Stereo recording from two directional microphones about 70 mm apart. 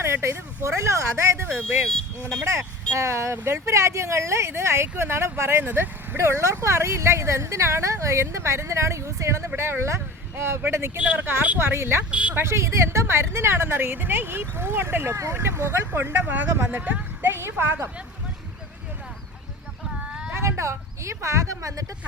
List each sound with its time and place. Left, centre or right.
0.0 s speech: right
10.9 s a woman's voice: right
19.8 s a sound: centre
20.3 s speech: right